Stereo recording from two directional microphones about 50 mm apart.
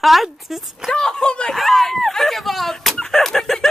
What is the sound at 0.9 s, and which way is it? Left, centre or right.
Speech, centre.